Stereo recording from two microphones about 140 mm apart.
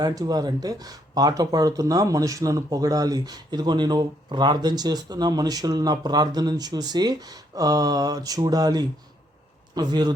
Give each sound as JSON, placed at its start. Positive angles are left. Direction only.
{"t": 0.0, "sound": "speech", "side_deg": -25}